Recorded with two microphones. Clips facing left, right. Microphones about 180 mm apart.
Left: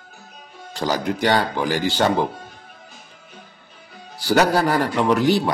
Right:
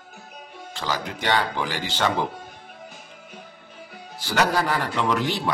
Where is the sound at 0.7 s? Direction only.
40° left (ahead or behind).